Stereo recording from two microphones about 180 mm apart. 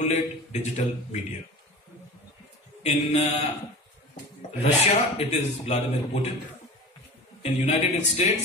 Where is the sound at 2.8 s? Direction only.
35° left (ahead or behind).